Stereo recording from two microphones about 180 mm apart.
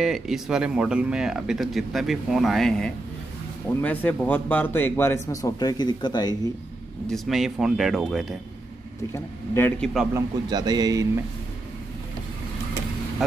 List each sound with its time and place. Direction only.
0.0 s speech: centre (ahead or behind); by 6.5 s 25° left (ahead or behind)
7.1 s speech: centre (ahead or behind)
9.1 s speech: 15° left (ahead or behind)
10.1 s speech: 20° right (ahead or behind)